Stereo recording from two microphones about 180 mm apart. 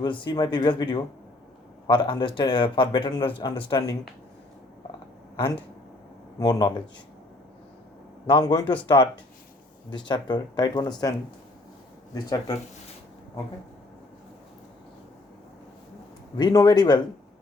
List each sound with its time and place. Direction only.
0.0 s speech: 25° left (ahead or behind)
6.4 s speech: 20° left (ahead or behind)
8.3 s speech: 25° left (ahead or behind)
9.9 s speech: 25° left (ahead or behind)
12.1 s speech: 20° left (ahead or behind)
16.4 s speech: 20° left (ahead or behind)